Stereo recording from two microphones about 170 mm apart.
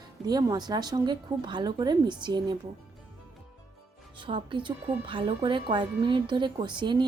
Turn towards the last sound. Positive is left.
turn(degrees=-25)  # may be behind; listen again after turning